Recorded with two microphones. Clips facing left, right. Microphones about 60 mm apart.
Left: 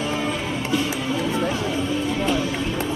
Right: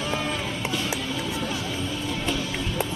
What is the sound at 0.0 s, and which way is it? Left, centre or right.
Music, centre.